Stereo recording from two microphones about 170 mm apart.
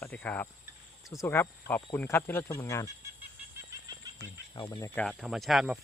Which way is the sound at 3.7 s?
20° right (ahead or behind).